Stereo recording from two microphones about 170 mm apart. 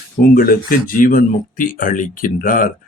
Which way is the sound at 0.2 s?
60° left (ahead or behind).